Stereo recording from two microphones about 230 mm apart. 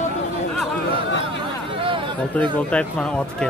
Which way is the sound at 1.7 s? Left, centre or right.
Right.